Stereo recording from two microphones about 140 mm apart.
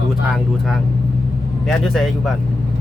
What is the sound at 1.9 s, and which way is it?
Speech, centre (ahead or behind).